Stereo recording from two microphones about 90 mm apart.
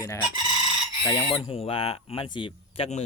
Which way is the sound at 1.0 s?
55° left (ahead or behind).